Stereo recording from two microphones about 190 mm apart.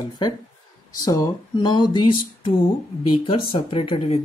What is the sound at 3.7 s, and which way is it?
Speech, 30° left (ahead or behind).